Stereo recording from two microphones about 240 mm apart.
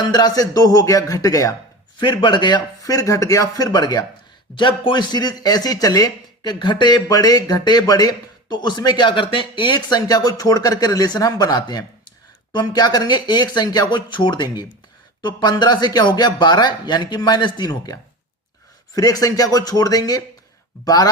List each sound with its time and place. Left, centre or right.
0.0 s speech: centre